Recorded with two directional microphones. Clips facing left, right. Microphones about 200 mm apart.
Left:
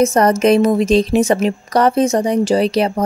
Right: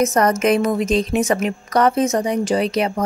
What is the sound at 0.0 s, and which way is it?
A woman's voice, 30° left (ahead or behind).